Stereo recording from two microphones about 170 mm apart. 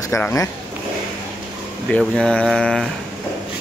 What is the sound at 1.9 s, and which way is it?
Speech, 5° left (ahead or behind).